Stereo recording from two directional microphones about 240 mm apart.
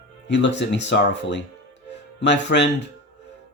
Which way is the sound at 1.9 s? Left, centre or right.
Left.